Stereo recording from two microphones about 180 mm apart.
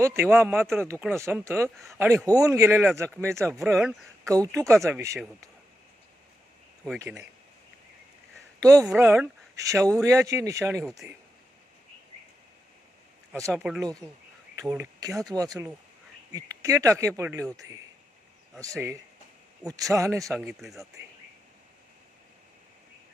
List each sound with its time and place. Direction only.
0.0 s speech: 15° right (ahead or behind)
1.7 s speech: centre (ahead or behind)
2.0 s speech: 15° right (ahead or behind)
3.6 s speech: 5° right (ahead or behind)
4.9 s speech: 15° right (ahead or behind)
8.6 s speech: 20° right (ahead or behind)
10.8 s speech: 5° right (ahead or behind)
13.6 s speech: 5° right (ahead or behind)
20.4 s speech: centre (ahead or behind)